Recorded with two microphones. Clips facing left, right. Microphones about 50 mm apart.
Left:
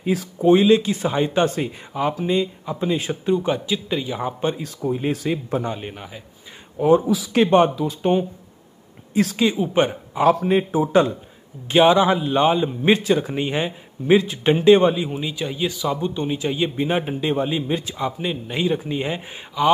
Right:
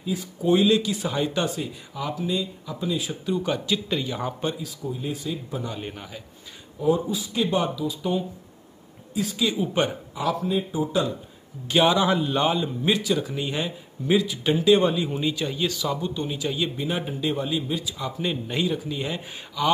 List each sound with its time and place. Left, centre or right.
0.0 s speech: left
0.4 s speech: left
3.3 s a man's voice: left
4.6 s speech: left
5.8 s a man's voice: centre
6.8 s speech: left
7.4 s speech: left
9.1 s speech: left
9.8 s speech: left
10.4 s a man's voice: left
11.6 s speech: left
12.8 s speech: left
14.9 s speech: left